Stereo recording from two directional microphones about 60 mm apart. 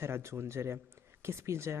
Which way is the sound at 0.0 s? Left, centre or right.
Right.